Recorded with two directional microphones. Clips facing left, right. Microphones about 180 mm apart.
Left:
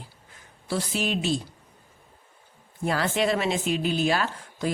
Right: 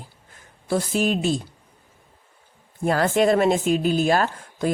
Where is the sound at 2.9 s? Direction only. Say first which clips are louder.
Right 6 dB; 45° right (ahead or behind).